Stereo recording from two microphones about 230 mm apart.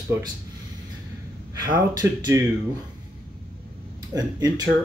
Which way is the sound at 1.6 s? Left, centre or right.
Centre.